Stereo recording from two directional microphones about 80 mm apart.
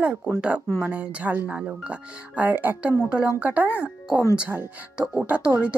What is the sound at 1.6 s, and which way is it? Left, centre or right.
A woman's voice, centre.